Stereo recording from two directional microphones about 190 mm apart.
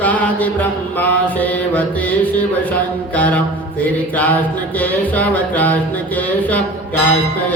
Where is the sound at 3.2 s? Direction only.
10° left (ahead or behind).